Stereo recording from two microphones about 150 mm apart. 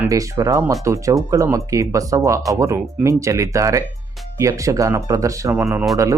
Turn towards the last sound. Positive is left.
turn(degrees=-15)  # may be behind; listen again after turning